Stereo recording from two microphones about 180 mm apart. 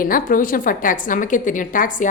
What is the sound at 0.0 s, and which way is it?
A woman's voice, 50° left (ahead or behind).